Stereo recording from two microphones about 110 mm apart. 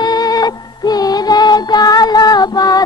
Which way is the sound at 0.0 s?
35° left (ahead or behind).